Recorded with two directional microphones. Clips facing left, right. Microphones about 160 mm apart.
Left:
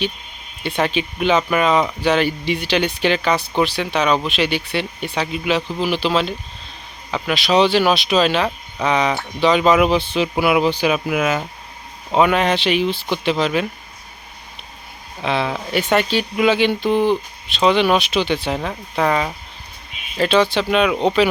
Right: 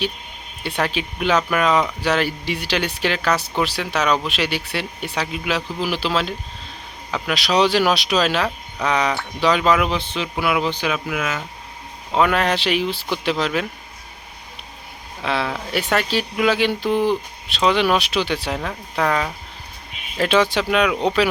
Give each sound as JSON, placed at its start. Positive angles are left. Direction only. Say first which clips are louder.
{"t": 0.6, "sound": "speech", "louder": "left 3 dB", "side_deg": -5}
{"t": 12.2, "sound": "speech", "louder": "left 2 dB", "side_deg": 0}
{"t": 15.2, "sound": "speech", "louder": "left 2 dB", "side_deg": 0}
{"t": 20.1, "sound": "speech", "louder": "left 2 dB", "side_deg": -5}